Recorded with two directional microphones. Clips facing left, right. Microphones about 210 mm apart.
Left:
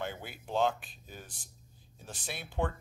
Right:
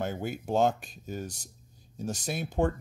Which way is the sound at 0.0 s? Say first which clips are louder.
Right 7 dB; 45° right (ahead or behind).